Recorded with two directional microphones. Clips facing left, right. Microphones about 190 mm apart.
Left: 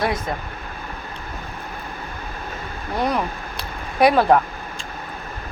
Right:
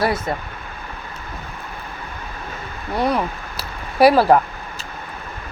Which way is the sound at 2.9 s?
Centre (ahead or behind).